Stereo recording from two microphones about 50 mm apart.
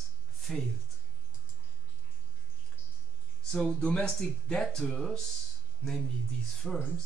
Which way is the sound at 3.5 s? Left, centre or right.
Centre.